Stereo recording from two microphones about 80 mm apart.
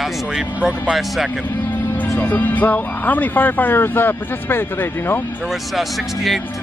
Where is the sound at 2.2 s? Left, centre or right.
Left.